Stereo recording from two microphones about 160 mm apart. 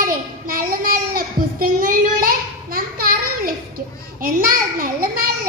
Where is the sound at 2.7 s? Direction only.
70° right (ahead or behind).